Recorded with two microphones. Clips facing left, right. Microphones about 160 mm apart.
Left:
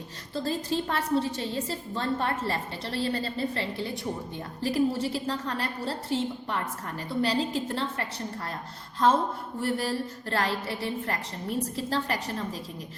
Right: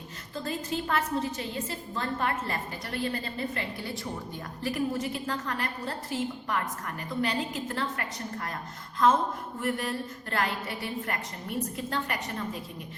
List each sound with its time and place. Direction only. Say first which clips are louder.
0.3 s a woman's voice: left 4 dB; 30° left (ahead or behind)
9.6 s a woman's voice: left 3 dB; 30° left (ahead or behind)